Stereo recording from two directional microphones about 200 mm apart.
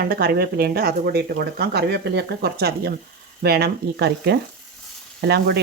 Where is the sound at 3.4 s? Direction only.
50° right (ahead or behind).